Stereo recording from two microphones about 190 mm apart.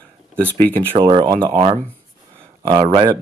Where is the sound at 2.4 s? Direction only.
25° right (ahead or behind).